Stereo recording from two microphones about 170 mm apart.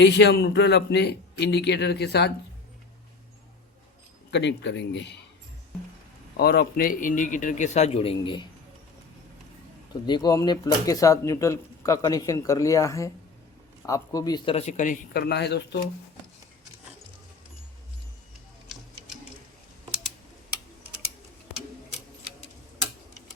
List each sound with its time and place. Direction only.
0.0 s a man's voice: 85° left
4.3 s speech: 90° left
6.3 s a man's voice: 70° left (ahead or behind); by 8.4 s 30° left (ahead or behind)
10.1 s speech: 25° left (ahead or behind)
14.5 s speech: 40° left (ahead or behind)
15.1 s speech: 70° left (ahead or behind)